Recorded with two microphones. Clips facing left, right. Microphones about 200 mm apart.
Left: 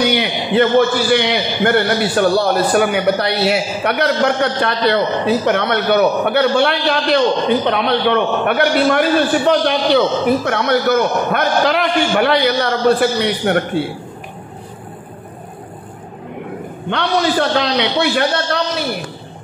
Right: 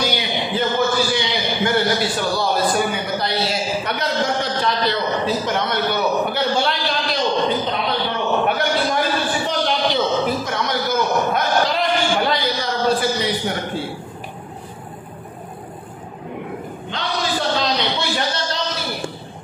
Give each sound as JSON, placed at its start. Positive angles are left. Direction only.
{"t": 0.0, "sound": "a man's voice", "side_deg": 65}
{"t": 16.9, "sound": "a man's voice", "side_deg": 65}